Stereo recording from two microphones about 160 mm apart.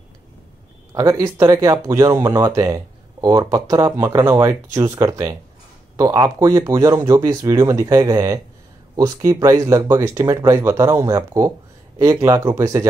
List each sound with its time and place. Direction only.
0.9 s speech: 20° right (ahead or behind)